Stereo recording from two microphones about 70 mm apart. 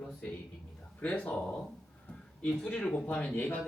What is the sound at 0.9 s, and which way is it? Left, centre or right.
Speech, left.